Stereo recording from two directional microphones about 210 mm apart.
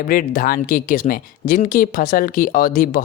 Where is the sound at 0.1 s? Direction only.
45° left (ahead or behind).